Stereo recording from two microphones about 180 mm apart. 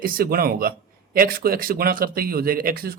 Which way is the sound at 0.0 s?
55° right (ahead or behind).